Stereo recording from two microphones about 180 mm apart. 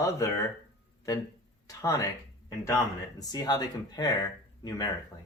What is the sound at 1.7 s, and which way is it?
Speech, 20° left (ahead or behind).